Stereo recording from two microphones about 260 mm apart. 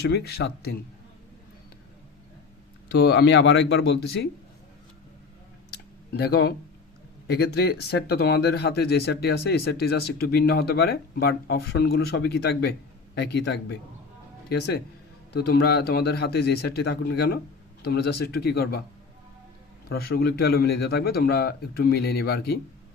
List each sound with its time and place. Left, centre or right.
0.1 s speech: left
2.9 s speech: left
6.1 s speech: left
15.3 s speech: left
19.9 s speech: left